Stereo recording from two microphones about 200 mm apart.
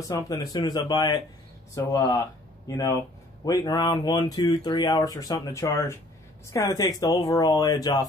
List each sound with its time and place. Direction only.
0.1 s speech: 15° left (ahead or behind)